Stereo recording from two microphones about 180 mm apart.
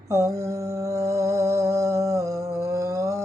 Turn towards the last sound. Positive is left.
turn(degrees=-15)  # may be behind; listen again after turning